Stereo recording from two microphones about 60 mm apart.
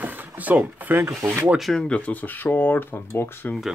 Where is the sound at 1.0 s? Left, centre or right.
Right.